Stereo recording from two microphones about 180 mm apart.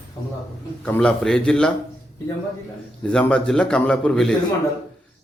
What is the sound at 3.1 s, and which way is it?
A man's voice, 5° left (ahead or behind).